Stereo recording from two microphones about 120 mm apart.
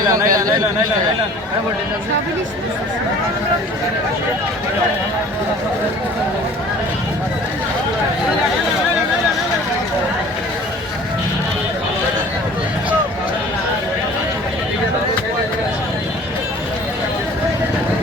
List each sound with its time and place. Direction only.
0.1 s speech: 30° right (ahead or behind)